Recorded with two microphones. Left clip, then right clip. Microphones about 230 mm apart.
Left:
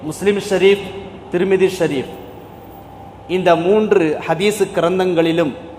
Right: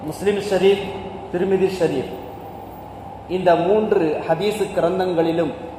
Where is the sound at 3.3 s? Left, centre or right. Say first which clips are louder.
Left 3 dB; left.